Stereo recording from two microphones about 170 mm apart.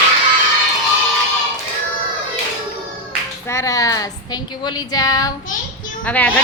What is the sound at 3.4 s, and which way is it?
Speech, 20° left (ahead or behind).